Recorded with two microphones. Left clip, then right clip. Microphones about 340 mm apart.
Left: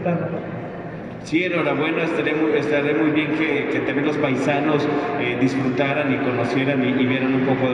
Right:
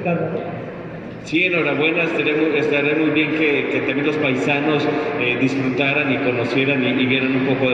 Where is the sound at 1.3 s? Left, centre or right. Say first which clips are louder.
Right 3 dB; left.